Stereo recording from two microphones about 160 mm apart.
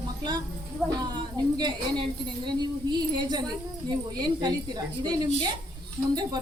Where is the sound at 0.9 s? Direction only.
25° right (ahead or behind).